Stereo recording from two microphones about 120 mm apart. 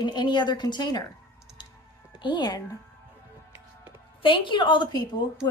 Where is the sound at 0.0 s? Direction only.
35° left (ahead or behind).